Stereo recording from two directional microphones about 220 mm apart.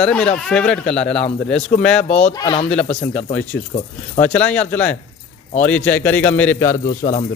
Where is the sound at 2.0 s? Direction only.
30° left (ahead or behind).